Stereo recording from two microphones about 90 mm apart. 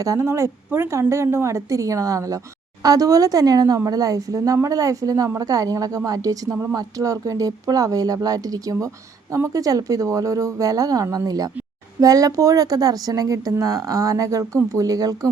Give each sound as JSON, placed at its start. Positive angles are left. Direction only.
{"t": 0.0, "sound": "speech", "side_deg": -35}